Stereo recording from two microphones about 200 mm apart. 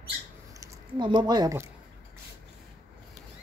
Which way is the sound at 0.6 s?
25° right (ahead or behind).